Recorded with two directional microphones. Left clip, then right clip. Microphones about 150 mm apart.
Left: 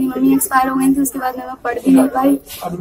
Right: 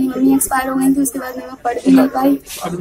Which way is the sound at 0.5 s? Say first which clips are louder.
Left 2 dB; 10° left (ahead or behind).